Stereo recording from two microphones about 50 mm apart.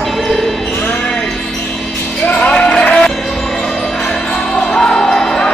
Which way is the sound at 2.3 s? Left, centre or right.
Left.